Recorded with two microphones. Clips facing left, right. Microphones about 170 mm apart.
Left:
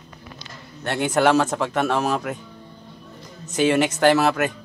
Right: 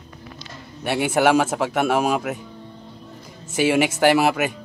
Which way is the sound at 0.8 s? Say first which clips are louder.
Right 1 dB; 10° right (ahead or behind).